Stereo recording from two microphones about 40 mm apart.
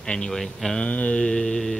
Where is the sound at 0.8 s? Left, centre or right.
Left; by 1.7 s centre.